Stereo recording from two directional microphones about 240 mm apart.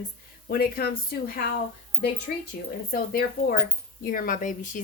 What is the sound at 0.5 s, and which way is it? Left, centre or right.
Speech, left.